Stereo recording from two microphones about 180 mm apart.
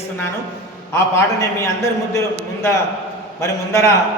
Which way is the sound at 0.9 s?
15° left (ahead or behind).